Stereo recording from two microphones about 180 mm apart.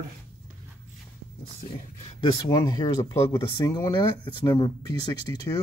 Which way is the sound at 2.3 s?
25° left (ahead or behind).